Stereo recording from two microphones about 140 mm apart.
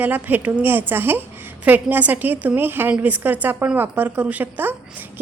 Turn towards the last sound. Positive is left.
turn(degrees=-15)  # may be behind; listen again after turning